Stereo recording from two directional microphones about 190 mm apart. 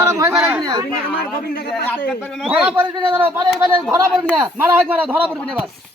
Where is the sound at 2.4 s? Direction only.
5° right (ahead or behind).